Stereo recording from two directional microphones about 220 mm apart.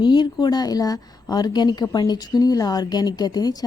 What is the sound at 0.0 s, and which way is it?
A woman's voice, 20° left (ahead or behind).